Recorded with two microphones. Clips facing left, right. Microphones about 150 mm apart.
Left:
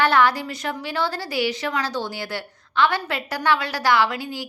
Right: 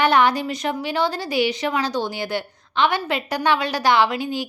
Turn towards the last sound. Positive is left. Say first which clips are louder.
# right 3 dB
turn(degrees=-20)  # may be behind; listen again after turning